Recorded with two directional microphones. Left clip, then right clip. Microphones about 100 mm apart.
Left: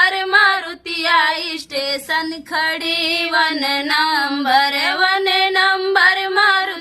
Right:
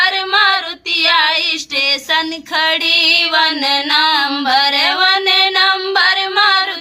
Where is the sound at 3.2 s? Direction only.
30° left (ahead or behind).